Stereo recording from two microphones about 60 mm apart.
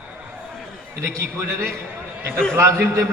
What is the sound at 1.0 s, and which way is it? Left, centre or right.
A man's voice, right.